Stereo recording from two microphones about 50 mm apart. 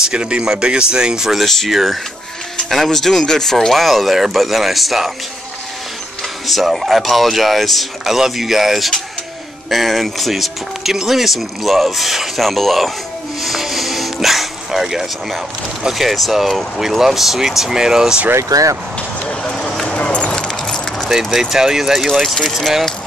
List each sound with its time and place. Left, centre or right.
0.0 s speech: centre
6.4 s speech: centre
13.4 s music: centre
15.9 s speech: centre
19.2 s speech: centre
20.0 s keys jangling: left
21.1 s speech: centre